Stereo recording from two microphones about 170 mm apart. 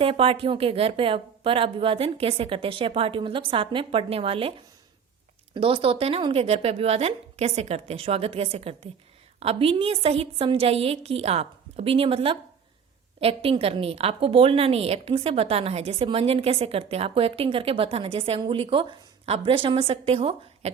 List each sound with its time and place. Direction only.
0.0 s a woman's voice: 35° right (ahead or behind)
5.5 s a woman's voice: 30° right (ahead or behind)